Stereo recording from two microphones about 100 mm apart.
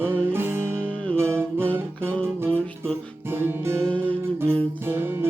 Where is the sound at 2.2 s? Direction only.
25° right (ahead or behind).